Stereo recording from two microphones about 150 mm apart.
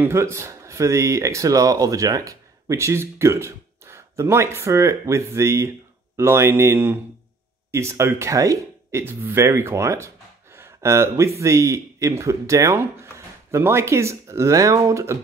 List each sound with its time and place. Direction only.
0.0 s speech: 15° right (ahead or behind)